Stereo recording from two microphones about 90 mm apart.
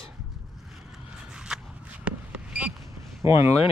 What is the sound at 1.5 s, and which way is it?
Shuffle, 5° right (ahead or behind).